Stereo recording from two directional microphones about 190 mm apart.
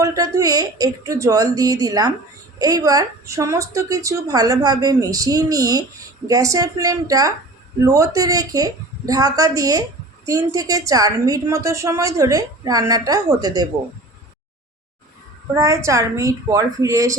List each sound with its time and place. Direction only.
0.0 s a woman's voice: 15° right (ahead or behind)
15.5 s a woman's voice: 15° right (ahead or behind)